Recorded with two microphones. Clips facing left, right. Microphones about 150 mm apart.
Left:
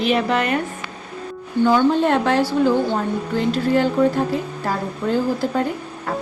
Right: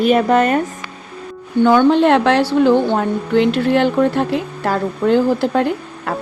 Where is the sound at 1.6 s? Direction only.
65° right (ahead or behind).